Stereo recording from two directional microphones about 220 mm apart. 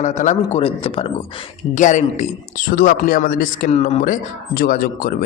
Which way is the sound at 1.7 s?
35° left (ahead or behind).